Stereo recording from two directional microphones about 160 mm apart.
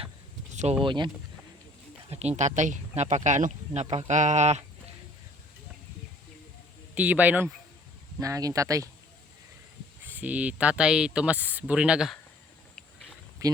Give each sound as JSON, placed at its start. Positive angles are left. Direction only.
{"t": 0.5, "sound": "speech", "side_deg": -45}
{"t": 0.9, "sound": "speech", "side_deg": -30}
{"t": 2.0, "sound": "speech", "side_deg": -45}
{"t": 6.9, "sound": "speech", "side_deg": -10}
{"t": 8.2, "sound": "speech", "side_deg": -20}
{"t": 10.0, "sound": "speech", "side_deg": -10}
{"t": 12.7, "sound": "a sound", "side_deg": 5}
{"t": 13.4, "sound": "speech", "side_deg": -20}